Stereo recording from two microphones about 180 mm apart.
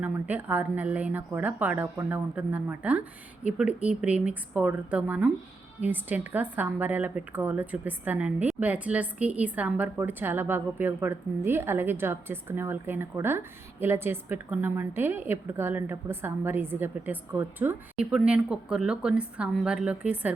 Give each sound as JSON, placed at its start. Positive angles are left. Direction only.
{"t": 0.0, "sound": "a woman's voice", "side_deg": -10}